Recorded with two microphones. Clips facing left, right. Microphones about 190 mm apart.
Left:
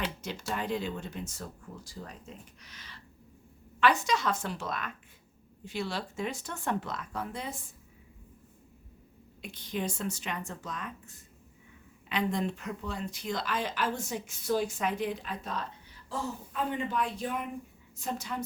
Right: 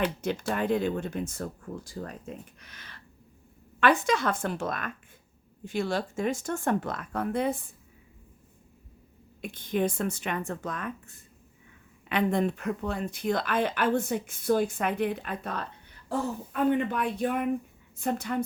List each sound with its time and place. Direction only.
0.0 s speech: 55° right (ahead or behind)
9.4 s speech: 50° right (ahead or behind)